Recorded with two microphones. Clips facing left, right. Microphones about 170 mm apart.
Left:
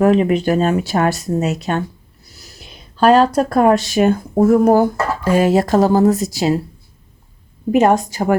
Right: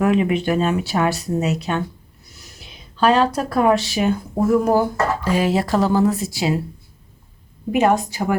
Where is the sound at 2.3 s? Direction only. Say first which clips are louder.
Left 3 dB; 35° left (ahead or behind).